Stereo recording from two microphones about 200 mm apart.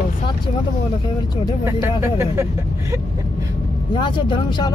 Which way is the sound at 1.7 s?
15° right (ahead or behind).